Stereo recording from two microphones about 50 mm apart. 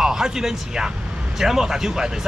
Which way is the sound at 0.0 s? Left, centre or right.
Centre.